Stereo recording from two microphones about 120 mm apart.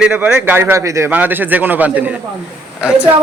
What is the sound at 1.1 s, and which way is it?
A man's voice, 15° right (ahead or behind).